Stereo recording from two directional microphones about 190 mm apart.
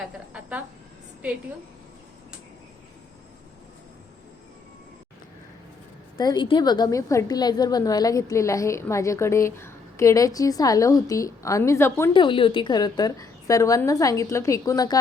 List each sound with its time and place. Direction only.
0.0 s a woman's voice: 5° right (ahead or behind)
6.1 s a woman's voice: 20° left (ahead or behind)
12.1 s a woman's voice: 25° left (ahead or behind)